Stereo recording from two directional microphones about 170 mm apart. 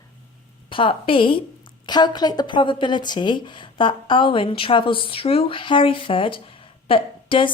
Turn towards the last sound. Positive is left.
turn(degrees=30)  # may be behind; listen again after turning